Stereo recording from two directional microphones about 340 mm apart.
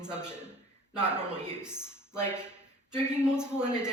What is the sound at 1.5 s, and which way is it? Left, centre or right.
A man's voice, centre.